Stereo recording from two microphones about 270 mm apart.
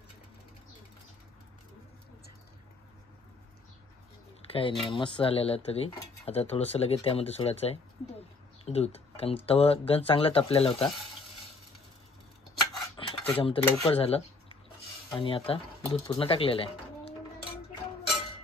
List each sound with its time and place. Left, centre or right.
4.5 s speech: centre
12.9 s cutlery: centre
15.1 s speech: centre